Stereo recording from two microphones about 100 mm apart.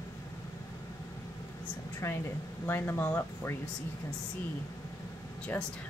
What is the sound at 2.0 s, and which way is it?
Speech, 30° left (ahead or behind).